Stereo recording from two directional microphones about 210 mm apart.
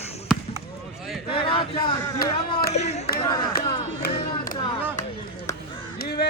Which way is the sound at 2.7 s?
30° left (ahead or behind).